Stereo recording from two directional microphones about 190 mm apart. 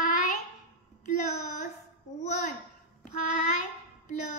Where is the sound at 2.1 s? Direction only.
40° left (ahead or behind).